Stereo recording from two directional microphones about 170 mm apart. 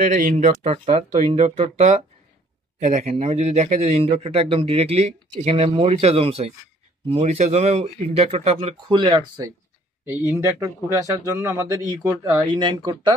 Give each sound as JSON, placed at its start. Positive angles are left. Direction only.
{"t": 0.0, "sound": "a man's voice", "side_deg": -50}
{"t": 10.0, "sound": "a man's voice", "side_deg": -15}